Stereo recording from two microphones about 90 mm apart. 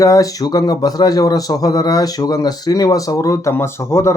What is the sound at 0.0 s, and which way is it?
A man's voice, 40° left (ahead or behind).